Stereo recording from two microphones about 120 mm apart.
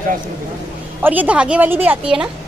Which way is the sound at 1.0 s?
10° right (ahead or behind).